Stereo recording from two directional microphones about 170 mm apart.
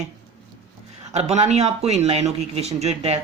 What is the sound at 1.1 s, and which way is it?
Speech, 40° right (ahead or behind).